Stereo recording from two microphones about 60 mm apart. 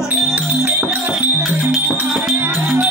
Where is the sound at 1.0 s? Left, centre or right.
Right.